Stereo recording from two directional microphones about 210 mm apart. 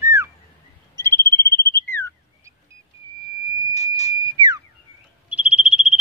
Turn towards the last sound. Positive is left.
turn(degrees=-5)  # may be behind; listen again after turning